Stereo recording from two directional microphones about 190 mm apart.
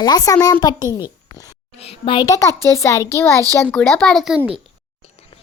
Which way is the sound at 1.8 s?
30° left (ahead or behind).